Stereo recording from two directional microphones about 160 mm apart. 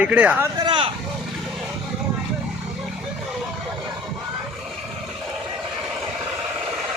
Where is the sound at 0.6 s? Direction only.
30° right (ahead or behind).